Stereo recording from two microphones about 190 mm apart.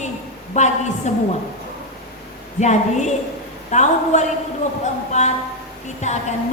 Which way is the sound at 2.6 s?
35° left (ahead or behind).